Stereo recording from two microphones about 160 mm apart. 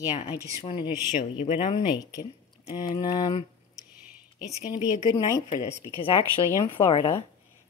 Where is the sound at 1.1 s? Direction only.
50° left (ahead or behind).